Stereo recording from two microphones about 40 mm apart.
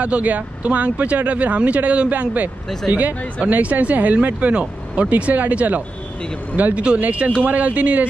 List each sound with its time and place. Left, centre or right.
0.0 s speech: right
5.1 s speech: right